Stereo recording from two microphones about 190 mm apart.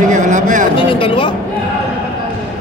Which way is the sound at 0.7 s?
30° left (ahead or behind).